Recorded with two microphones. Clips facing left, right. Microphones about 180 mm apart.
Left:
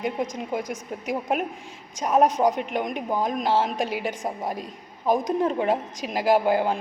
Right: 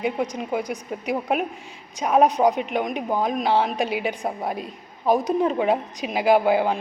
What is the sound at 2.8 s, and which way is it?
A woman's voice, 15° right (ahead or behind).